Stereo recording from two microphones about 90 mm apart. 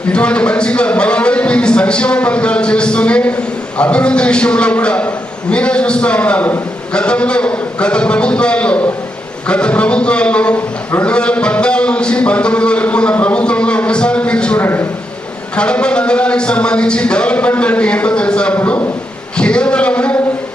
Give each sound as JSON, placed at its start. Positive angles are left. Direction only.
{"t": 0.1, "sound": "a man's voice", "side_deg": 10}
{"t": 14.6, "sound": "a man's voice", "side_deg": 25}
{"t": 15.5, "sound": "a man's voice", "side_deg": 10}